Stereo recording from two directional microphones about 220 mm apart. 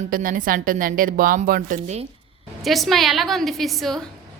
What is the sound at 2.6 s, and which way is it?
A woman's voice, centre (ahead or behind).